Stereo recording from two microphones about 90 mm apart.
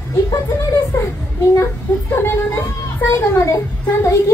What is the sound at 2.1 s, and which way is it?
A woman's voice, 25° left (ahead or behind).